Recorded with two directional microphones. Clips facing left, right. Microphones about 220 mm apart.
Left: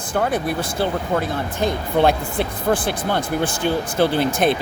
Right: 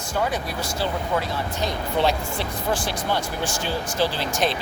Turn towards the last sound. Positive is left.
turn(degrees=55)  # may be behind; listen again after turning